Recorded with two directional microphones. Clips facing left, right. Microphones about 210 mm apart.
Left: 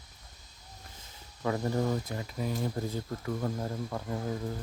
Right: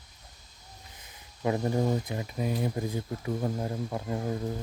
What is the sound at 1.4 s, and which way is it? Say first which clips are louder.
Speech: right 3 dB; 20° right (ahead or behind).